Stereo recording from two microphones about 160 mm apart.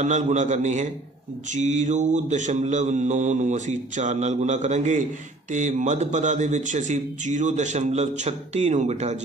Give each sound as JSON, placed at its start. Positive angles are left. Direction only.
{"t": 0.0, "sound": "speech", "side_deg": -50}